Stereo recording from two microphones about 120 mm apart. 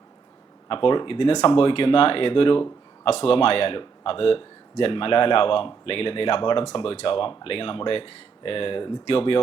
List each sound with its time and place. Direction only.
0.7 s speech: 45° left (ahead or behind)